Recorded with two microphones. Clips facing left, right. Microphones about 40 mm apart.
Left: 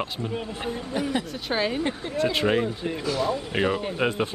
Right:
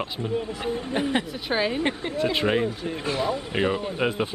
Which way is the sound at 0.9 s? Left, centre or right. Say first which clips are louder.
Right 2 dB; right.